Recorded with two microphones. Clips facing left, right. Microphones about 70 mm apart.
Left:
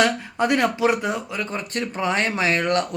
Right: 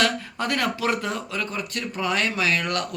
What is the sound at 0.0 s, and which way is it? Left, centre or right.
Speech, left.